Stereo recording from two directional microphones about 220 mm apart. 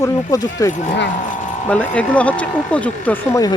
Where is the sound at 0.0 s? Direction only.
15° left (ahead or behind).